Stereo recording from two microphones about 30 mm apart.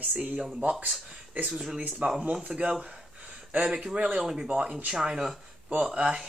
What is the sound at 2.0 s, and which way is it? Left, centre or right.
Speech, right.